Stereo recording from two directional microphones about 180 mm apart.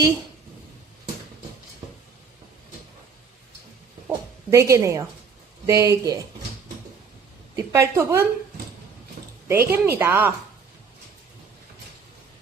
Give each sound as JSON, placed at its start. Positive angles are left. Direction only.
{"t": 4.5, "sound": "speech", "side_deg": -15}
{"t": 7.5, "sound": "speech", "side_deg": -15}
{"t": 9.5, "sound": "speech", "side_deg": -10}